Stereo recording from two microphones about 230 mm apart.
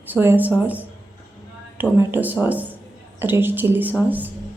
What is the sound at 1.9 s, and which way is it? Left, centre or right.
A woman's voice, centre.